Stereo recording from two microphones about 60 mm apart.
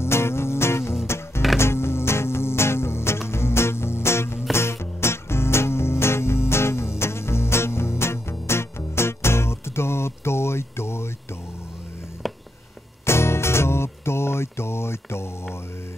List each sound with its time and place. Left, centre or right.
0.0 s music: left
13.0 s music: left